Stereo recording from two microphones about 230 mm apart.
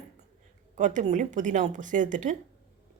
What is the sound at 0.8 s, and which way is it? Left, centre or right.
Speech, right.